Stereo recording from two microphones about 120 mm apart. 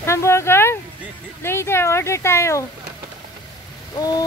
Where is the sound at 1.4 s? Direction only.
20° left (ahead or behind).